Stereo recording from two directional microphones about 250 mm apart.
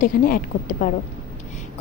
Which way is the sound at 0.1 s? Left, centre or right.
Left.